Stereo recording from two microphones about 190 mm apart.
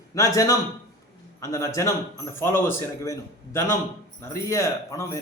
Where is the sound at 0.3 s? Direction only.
15° left (ahead or behind).